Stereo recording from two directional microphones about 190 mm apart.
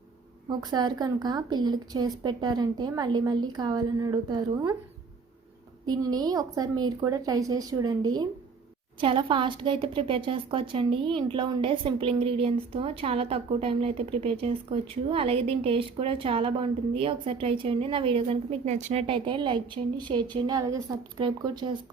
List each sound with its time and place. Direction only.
0.4 s a woman's voice: 20° right (ahead or behind)
5.8 s a woman's voice: 20° right (ahead or behind)